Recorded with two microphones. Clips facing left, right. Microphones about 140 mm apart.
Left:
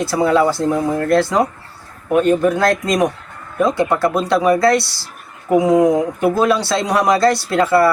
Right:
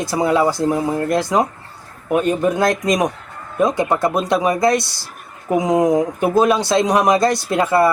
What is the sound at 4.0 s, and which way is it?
Speech, 20° right (ahead or behind).